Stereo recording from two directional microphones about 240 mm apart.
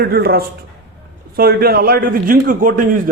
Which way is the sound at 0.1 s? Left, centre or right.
Right.